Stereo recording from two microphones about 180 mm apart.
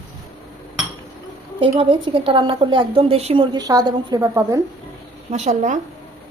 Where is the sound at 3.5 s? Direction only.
20° right (ahead or behind).